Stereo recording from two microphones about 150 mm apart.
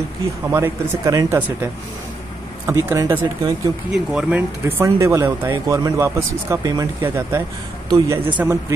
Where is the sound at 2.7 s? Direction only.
20° right (ahead or behind).